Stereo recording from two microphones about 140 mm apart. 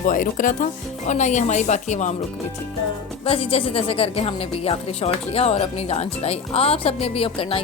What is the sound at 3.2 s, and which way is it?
A woman's voice, 40° left (ahead or behind).